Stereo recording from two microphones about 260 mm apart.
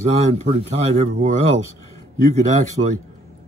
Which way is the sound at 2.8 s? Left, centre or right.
Right.